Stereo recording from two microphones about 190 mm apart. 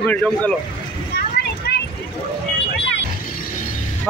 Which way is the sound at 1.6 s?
55° left (ahead or behind).